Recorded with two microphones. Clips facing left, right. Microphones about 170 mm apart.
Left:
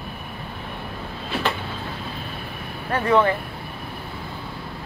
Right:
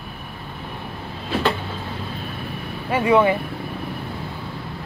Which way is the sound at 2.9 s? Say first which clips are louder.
Right 2 dB; 10° right (ahead or behind).